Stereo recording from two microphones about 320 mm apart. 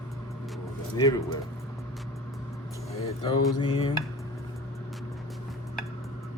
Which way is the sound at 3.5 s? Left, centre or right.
Centre.